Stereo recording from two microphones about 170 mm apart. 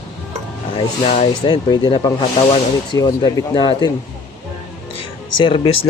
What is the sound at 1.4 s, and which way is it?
Speech, 25° left (ahead or behind).